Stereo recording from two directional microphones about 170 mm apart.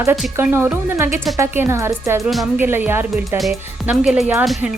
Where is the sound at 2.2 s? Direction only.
Centre (ahead or behind).